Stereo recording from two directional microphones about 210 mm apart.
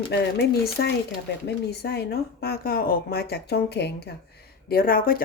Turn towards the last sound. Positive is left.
turn(degrees=45)  # may be behind; listen again after turning